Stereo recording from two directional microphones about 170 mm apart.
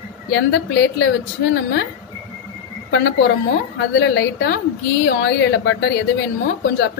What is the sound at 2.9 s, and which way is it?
A woman's voice, 85° left.